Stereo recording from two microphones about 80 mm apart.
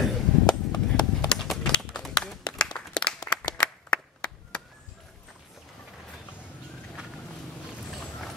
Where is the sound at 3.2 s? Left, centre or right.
Left.